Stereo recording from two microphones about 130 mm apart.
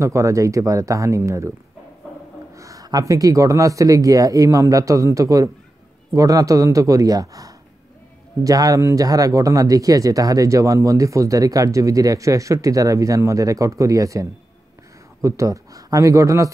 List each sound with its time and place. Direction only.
0.0 s speech: 25° right (ahead or behind)
2.5 s speech: 25° right (ahead or behind)
15.2 s speech: 25° right (ahead or behind)